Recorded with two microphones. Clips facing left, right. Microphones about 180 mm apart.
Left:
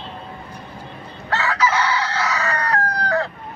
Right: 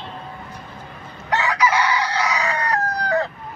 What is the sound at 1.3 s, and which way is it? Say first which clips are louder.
Chicken: right 1 dB; 15° right (ahead or behind).